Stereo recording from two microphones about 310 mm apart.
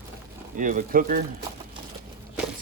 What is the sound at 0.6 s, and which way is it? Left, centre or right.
Speech, right.